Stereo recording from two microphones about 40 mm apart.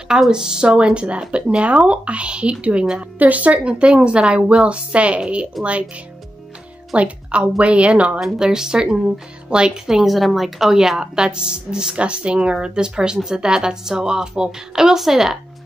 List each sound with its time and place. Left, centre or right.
0.3 s speech: centre
3.2 s a woman's voice: right
3.5 s a woman's voice: right
7.0 s a woman's voice: right
8.4 s a woman's voice: centre